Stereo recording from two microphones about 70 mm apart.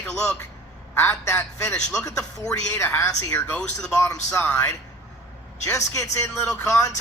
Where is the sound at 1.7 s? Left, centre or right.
Centre.